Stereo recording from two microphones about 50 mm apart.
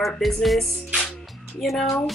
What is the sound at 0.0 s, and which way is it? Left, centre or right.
Music, centre.